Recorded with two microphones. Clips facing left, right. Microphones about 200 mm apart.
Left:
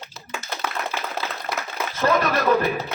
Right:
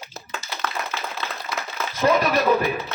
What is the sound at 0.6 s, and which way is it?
Tap, 10° left (ahead or behind).